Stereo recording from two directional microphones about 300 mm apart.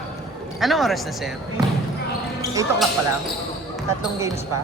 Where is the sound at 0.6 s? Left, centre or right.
Centre.